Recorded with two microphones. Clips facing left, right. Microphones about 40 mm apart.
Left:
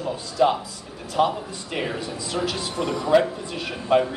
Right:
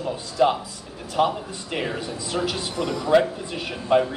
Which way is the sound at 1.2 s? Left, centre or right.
Centre.